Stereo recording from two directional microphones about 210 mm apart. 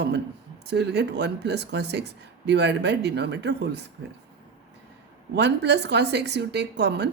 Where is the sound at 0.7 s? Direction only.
55° right (ahead or behind).